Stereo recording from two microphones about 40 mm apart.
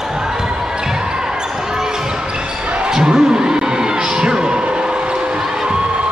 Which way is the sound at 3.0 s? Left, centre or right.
Centre.